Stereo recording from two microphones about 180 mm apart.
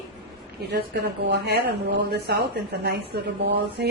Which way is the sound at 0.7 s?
65° right (ahead or behind).